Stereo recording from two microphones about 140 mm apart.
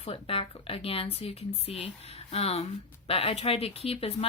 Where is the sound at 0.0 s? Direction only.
40° left (ahead or behind).